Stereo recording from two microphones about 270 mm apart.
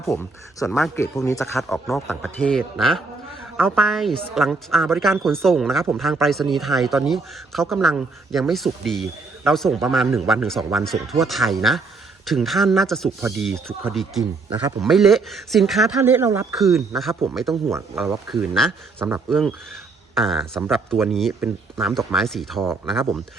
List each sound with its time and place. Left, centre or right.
0.0 s speech: centre
1.4 s a man's voice: centre
17.7 s a man's voice: centre